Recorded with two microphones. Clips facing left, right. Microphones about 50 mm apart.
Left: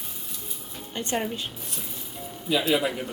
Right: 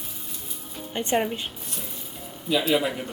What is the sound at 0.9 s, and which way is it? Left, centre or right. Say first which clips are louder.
Speech: right 4 dB; centre.